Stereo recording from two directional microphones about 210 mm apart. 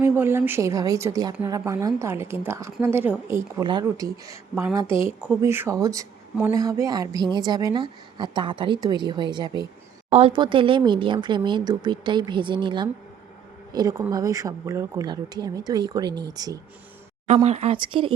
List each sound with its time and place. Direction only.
0.0 s a woman's voice: 10° right (ahead or behind)
17.2 s a woman's voice: 30° right (ahead or behind)